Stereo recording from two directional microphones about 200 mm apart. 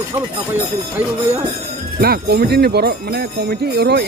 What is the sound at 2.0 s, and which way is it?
Speech, 50° right (ahead or behind).